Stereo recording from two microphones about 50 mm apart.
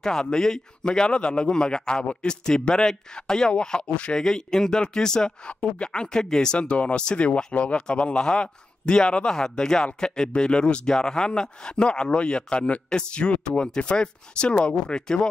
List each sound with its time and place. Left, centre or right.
0.0 s speech: centre
4.2 s speech: centre